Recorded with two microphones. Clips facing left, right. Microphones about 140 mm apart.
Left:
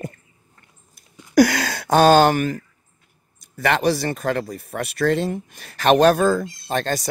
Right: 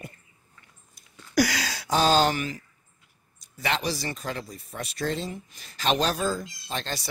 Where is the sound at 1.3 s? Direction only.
55° left (ahead or behind).